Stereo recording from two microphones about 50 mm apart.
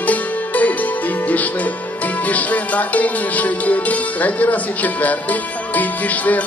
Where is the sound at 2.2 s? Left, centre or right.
Left.